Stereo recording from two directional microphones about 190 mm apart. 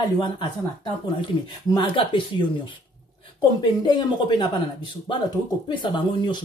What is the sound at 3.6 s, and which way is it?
Speech, 25° left (ahead or behind).